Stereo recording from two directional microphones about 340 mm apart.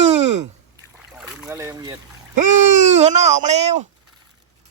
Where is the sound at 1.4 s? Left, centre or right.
Centre.